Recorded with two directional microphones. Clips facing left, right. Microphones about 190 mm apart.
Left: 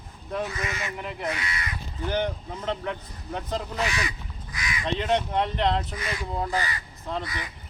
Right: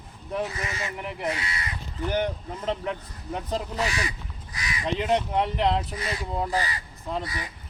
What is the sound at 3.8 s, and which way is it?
Speech, 35° right (ahead or behind).